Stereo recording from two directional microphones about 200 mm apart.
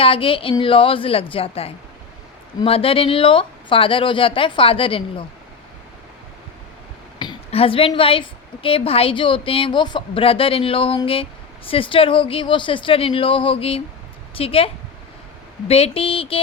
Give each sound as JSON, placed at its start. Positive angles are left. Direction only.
{"t": 0.0, "sound": "a woman's voice", "side_deg": 25}
{"t": 7.2, "sound": "a woman's voice", "side_deg": 25}